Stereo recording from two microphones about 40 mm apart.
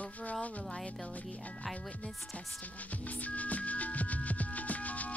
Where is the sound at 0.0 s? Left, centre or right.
Left.